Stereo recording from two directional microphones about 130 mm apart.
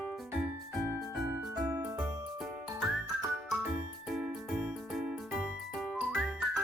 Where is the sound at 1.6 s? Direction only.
20° right (ahead or behind).